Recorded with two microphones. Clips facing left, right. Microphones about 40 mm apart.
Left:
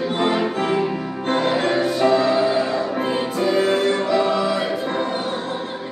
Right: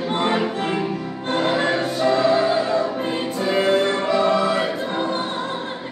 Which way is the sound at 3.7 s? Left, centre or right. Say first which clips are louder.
Even; centre.